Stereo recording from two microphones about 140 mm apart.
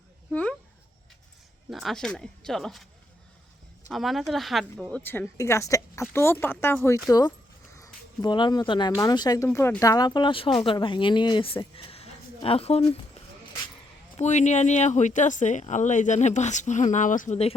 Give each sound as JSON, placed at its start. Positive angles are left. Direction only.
{"t": 0.3, "sound": "speech", "side_deg": 10}
{"t": 1.7, "sound": "speech", "side_deg": 0}
{"t": 3.9, "sound": "a woman's voice", "side_deg": 0}
{"t": 9.5, "sound": "speech", "side_deg": 15}
{"t": 14.2, "sound": "speech", "side_deg": 55}